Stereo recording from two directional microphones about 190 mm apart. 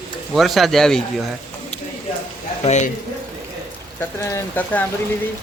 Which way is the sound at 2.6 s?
40° left (ahead or behind).